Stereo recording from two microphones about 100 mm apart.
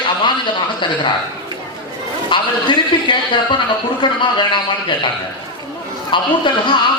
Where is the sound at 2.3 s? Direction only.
55° left (ahead or behind).